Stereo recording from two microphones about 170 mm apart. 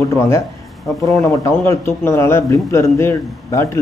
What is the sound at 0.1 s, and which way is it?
Speech, 15° left (ahead or behind).